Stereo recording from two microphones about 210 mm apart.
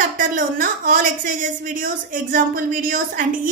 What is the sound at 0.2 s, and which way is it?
A woman's voice, 40° right (ahead or behind).